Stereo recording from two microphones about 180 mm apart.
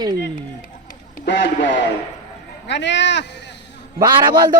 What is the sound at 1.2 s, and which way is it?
Speech, 75° left (ahead or behind).